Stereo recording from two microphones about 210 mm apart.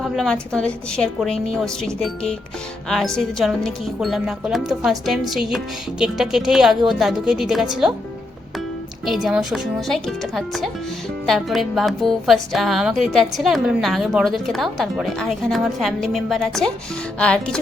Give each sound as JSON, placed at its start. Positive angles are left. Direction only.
{"t": 0.0, "sound": "a woman's voice", "side_deg": 0}
{"t": 9.0, "sound": "a woman's voice", "side_deg": 0}